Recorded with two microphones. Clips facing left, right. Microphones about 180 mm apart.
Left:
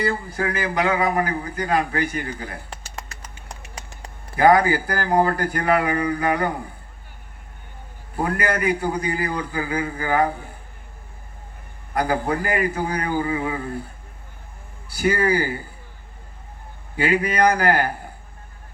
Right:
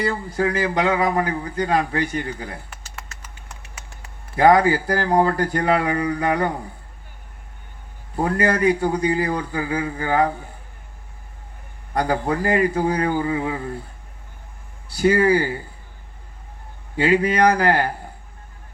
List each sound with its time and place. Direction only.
0.0 s a man's voice: 25° right (ahead or behind)
4.4 s a man's voice: 25° right (ahead or behind)
8.1 s a man's voice: 25° right (ahead or behind)
11.9 s a man's voice: 25° right (ahead or behind)
14.9 s a man's voice: 25° right (ahead or behind)
17.0 s a man's voice: 25° right (ahead or behind)